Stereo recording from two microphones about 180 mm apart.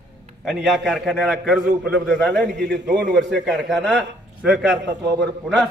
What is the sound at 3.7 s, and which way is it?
A man's voice, centre (ahead or behind).